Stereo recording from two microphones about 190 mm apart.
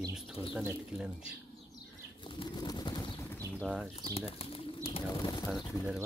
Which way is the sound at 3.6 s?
5° right (ahead or behind).